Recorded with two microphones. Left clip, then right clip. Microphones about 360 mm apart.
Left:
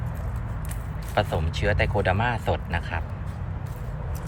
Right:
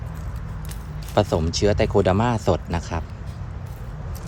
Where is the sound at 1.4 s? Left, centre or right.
Centre.